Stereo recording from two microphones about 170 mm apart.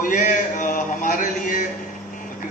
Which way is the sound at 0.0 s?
50° left (ahead or behind).